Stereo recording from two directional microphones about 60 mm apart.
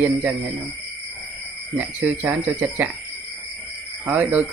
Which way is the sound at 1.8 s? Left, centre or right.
Right.